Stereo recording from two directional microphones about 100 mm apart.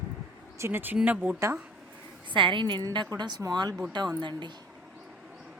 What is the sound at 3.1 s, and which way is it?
Speech, 40° right (ahead or behind).